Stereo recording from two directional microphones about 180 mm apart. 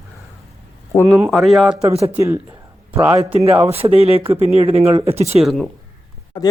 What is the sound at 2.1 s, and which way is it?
Speech, 10° right (ahead or behind).